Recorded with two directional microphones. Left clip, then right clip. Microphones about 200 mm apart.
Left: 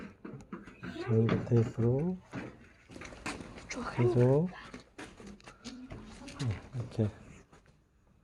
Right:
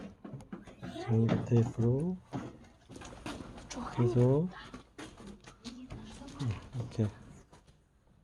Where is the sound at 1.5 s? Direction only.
10° left (ahead or behind).